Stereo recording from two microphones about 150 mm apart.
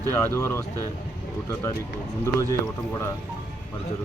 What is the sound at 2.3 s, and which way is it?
Speech, 20° left (ahead or behind).